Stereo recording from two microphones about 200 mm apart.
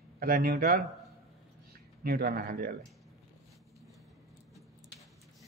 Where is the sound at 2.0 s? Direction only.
50° right (ahead or behind).